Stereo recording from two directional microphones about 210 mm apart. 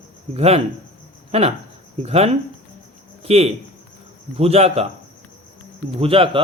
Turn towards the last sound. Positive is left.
turn(degrees=-25)  # may be behind; listen again after turning